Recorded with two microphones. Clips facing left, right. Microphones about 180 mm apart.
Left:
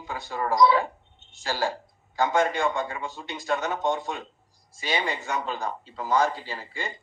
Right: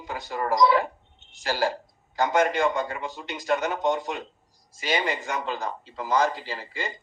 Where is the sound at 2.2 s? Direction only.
45° right (ahead or behind).